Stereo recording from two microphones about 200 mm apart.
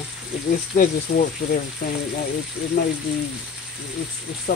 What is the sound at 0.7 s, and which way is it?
Speech, 45° left (ahead or behind).